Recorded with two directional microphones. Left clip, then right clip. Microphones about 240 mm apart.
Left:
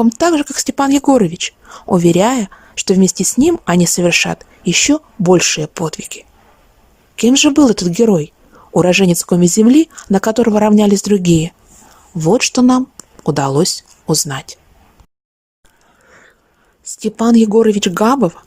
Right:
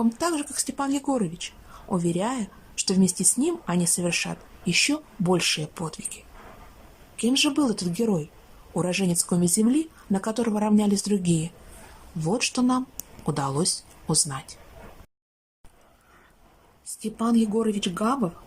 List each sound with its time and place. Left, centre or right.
0.0 s a woman's voice: left
17.0 s a woman's voice: left